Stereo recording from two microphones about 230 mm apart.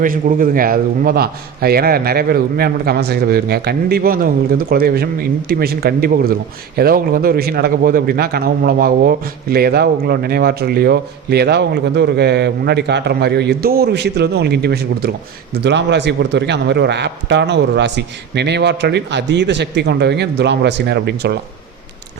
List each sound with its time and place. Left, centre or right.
0.0 s a man's voice: right